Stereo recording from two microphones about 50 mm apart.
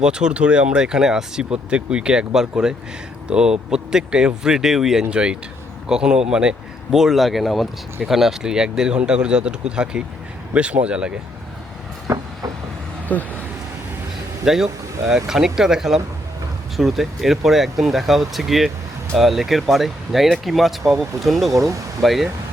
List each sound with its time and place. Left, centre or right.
0.0 s speech: centre
5.1 s speech: centre
12.1 s vehicle: right
13.1 s speech: left
14.4 s speech: centre
21.5 s speech: right
22.0 s speech: centre